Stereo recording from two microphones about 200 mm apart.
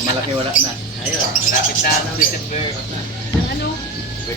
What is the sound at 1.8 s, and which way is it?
Speech, 45° left (ahead or behind).